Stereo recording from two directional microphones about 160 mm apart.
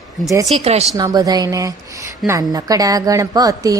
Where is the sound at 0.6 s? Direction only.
40° right (ahead or behind).